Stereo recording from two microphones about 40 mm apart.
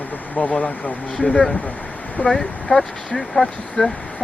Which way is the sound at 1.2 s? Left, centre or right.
Left.